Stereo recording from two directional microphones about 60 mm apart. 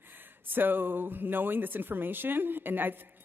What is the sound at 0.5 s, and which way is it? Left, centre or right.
A woman's voice, right.